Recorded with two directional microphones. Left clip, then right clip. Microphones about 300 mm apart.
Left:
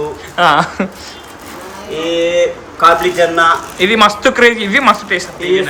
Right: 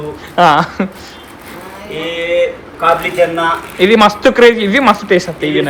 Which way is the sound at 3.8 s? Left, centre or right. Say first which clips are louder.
Right 3 dB; centre.